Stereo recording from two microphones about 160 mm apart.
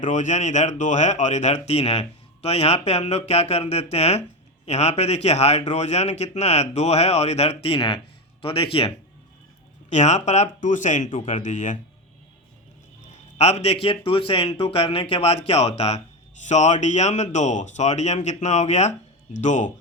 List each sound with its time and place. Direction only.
0.0 s a man's voice: 50° left (ahead or behind); by 8.9 s 35° left (ahead or behind)
9.9 s a man's voice: 45° left (ahead or behind)
13.4 s a man's voice: 45° left (ahead or behind)